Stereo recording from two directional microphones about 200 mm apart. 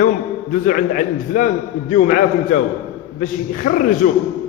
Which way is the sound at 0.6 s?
40° left (ahead or behind).